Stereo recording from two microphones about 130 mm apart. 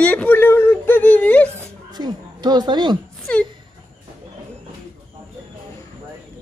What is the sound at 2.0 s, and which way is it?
A woman's voice, 35° right (ahead or behind).